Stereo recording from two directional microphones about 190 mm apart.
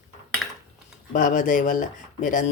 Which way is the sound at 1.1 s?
40° left (ahead or behind).